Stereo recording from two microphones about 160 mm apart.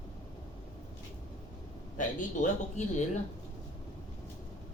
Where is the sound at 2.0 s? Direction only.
50° left (ahead or behind).